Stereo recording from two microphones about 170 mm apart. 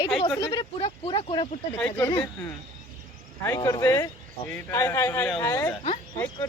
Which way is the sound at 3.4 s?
20° left (ahead or behind).